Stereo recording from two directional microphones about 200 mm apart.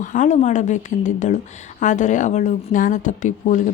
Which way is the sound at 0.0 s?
40° left (ahead or behind).